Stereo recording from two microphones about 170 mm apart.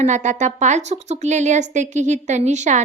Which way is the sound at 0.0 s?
45° right (ahead or behind).